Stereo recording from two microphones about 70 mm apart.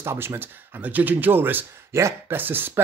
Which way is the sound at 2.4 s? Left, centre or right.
Right.